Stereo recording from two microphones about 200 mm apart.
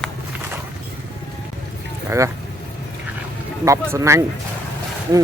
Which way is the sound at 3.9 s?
15° right (ahead or behind).